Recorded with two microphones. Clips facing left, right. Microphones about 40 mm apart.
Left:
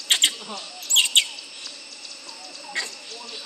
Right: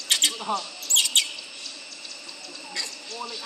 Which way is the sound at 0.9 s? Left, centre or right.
Left.